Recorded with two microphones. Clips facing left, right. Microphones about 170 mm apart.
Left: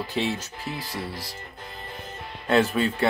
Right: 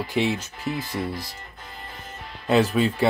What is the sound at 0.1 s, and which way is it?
Speech, 15° right (ahead or behind).